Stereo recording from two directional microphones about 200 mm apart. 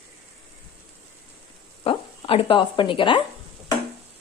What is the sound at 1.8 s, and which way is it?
Speech, 25° left (ahead or behind).